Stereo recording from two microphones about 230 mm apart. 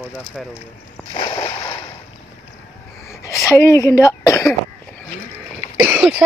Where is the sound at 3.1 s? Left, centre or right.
Centre.